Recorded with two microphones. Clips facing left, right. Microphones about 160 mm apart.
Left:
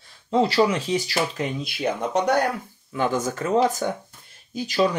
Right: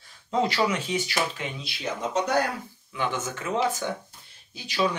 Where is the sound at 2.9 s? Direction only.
40° left (ahead or behind).